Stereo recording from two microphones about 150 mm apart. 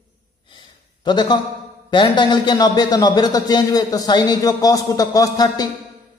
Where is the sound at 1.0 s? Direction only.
30° left (ahead or behind).